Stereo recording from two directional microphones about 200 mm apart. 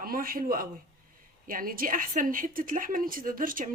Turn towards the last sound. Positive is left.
turn(degrees=-45)  # may be behind; listen again after turning